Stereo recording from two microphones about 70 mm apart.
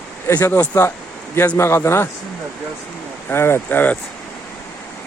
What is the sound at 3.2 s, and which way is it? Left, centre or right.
Speech, left.